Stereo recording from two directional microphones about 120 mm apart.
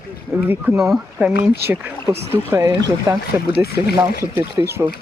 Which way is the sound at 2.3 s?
20° right (ahead or behind).